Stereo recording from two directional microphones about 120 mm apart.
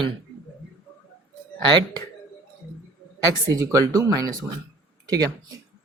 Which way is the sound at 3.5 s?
25° right (ahead or behind).